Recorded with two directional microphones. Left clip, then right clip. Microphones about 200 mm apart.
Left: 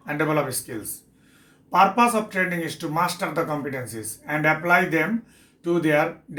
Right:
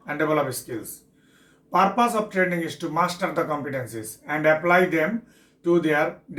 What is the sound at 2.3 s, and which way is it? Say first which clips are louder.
Speech: right 1 dB; 40° left (ahead or behind).